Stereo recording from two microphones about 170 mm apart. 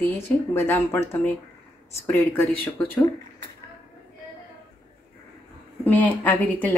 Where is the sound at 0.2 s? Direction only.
15° left (ahead or behind).